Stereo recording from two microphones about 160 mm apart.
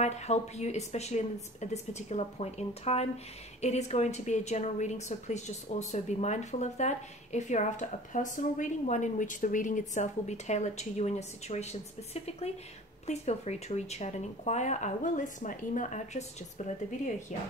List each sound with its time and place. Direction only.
0.0 s a woman's voice: 45° left (ahead or behind)